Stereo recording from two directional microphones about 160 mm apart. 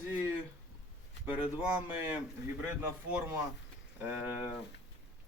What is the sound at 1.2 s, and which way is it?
Speech, 10° right (ahead or behind).